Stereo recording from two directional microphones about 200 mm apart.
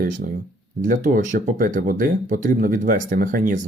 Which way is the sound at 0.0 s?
45° right (ahead or behind).